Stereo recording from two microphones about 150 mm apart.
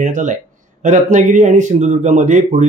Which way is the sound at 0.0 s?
55° right (ahead or behind).